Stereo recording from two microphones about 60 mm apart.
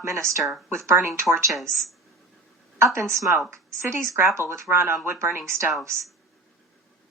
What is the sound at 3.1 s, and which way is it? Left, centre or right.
Speech, right.